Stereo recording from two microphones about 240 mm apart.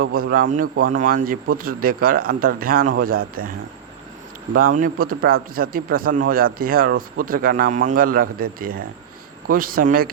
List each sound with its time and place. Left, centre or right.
0.0 s speech: right
4.5 s speech: right